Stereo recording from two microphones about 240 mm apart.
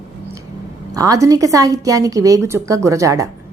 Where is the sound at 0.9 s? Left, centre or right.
Centre.